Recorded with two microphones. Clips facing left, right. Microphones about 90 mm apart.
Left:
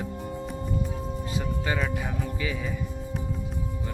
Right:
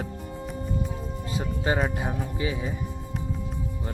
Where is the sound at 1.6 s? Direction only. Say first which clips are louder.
Right 6 dB; 35° right (ahead or behind).